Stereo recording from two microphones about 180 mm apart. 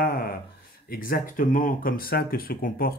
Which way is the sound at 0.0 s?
55° left (ahead or behind).